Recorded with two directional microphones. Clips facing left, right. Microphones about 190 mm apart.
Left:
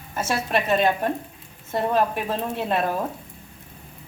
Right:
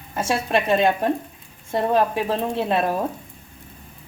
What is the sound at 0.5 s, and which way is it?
Speech, 25° right (ahead or behind).